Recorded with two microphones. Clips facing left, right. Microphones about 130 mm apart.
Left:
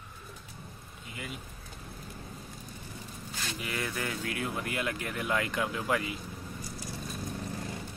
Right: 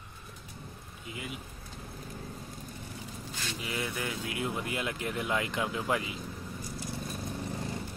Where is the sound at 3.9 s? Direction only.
10° right (ahead or behind).